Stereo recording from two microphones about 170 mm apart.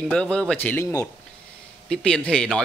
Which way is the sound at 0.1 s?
5° left (ahead or behind).